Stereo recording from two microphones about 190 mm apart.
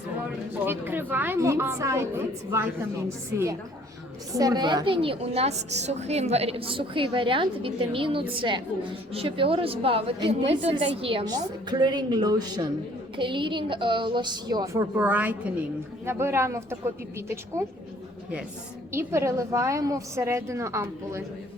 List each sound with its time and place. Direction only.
0.6 s a woman's voice: 10° right (ahead or behind)
4.4 s a woman's voice: 20° right (ahead or behind)
18.9 s a woman's voice: 15° right (ahead or behind)